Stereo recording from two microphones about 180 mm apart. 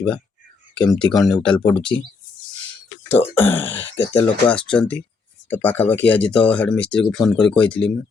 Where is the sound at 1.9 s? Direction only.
20° left (ahead or behind).